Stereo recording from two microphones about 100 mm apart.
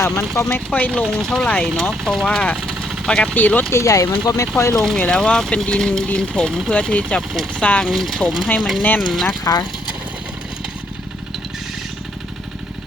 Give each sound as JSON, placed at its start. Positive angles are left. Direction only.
{"t": 0.3, "sound": "speech", "side_deg": 30}
{"t": 0.7, "sound": "speech", "side_deg": 15}
{"t": 2.2, "sound": "speech", "side_deg": 10}
{"t": 3.3, "sound": "speech", "side_deg": 15}
{"t": 3.8, "sound": "speech", "side_deg": 30}
{"t": 4.8, "sound": "speech", "side_deg": 5}
{"t": 7.9, "sound": "speech", "side_deg": 0}
{"t": 9.4, "sound": "speech", "side_deg": 35}